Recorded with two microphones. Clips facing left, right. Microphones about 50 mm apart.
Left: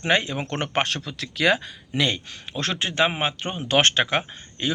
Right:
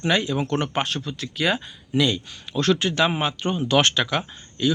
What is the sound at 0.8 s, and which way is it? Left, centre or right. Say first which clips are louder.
Speech: right 1 dB; left.